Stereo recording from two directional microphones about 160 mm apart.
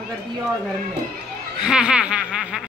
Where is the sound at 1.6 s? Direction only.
5° right (ahead or behind).